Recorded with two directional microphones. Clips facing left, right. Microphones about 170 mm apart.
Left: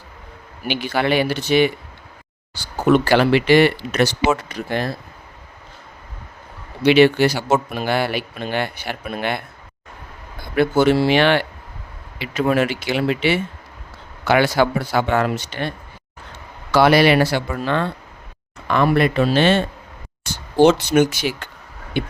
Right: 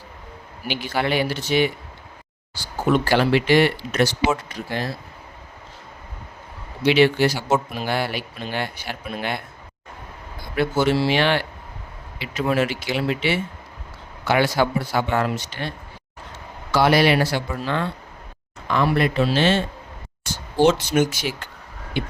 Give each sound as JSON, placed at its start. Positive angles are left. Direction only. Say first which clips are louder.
{"t": 0.7, "sound": "speech", "louder": "left 4 dB", "side_deg": 65}
{"t": 2.9, "sound": "speech", "louder": "left 4 dB", "side_deg": 70}
{"t": 6.8, "sound": "speech", "louder": "left 4 dB", "side_deg": 60}
{"t": 10.5, "sound": "speech", "louder": "left 5 dB", "side_deg": 60}
{"t": 16.7, "sound": "speech", "louder": "left 4 dB", "side_deg": 65}
{"t": 22.0, "sound": "speech", "louder": "left 3 dB", "side_deg": 55}